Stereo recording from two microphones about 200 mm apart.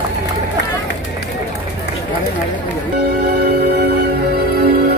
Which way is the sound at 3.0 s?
50° right (ahead or behind).